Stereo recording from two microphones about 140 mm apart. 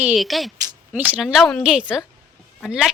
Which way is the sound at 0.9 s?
10° right (ahead or behind).